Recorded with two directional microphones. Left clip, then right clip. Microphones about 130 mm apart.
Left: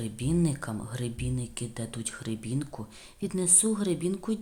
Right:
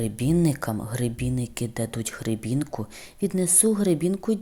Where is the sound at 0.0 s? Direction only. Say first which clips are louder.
Right 6 dB; 45° right (ahead or behind).